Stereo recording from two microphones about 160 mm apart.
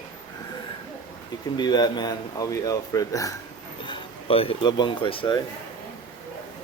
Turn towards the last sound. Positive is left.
turn(degrees=30)  # may be behind; listen again after turning